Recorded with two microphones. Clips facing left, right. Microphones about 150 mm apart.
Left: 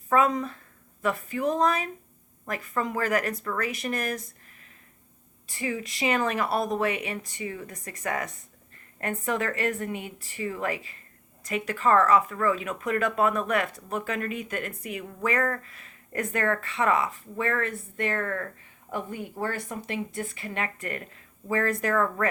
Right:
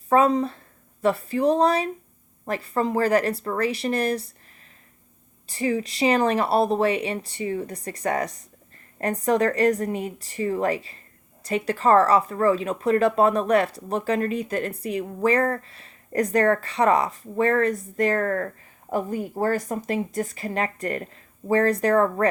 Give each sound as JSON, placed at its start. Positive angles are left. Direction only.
{"t": 0.1, "sound": "speech", "side_deg": -35}
{"t": 5.5, "sound": "speech", "side_deg": -35}